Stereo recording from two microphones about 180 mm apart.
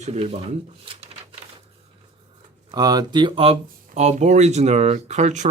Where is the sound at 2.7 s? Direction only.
20° right (ahead or behind).